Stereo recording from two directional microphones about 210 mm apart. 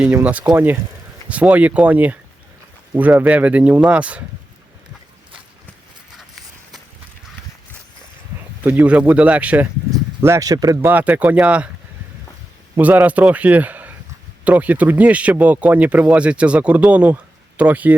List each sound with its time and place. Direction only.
0.0 s speech: 10° right (ahead or behind)
8.6 s speech: 10° right (ahead or behind)
12.7 s speech: 10° right (ahead or behind)